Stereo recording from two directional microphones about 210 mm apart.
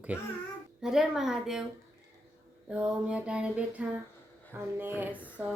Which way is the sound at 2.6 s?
5° right (ahead or behind).